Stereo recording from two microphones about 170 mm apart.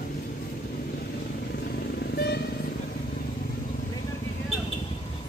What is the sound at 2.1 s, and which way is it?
Vehicle, 70° left (ahead or behind).